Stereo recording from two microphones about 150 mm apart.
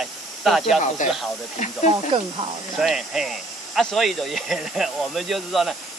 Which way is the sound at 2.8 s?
Centre (ahead or behind).